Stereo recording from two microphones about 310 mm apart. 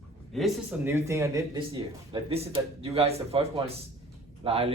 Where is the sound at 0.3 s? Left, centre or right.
Centre.